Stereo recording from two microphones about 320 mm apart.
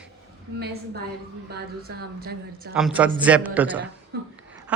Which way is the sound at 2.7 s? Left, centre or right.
Centre.